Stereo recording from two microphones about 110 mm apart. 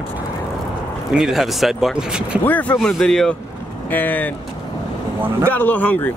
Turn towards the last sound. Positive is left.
turn(degrees=15)  # may be behind; listen again after turning